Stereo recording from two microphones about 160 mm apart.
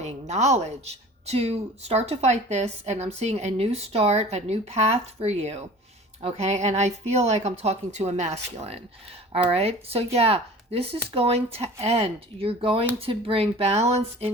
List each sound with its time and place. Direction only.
0.0 s speech: 45° right (ahead or behind)